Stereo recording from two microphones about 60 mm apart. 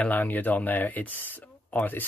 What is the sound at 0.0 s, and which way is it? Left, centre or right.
Speech, left.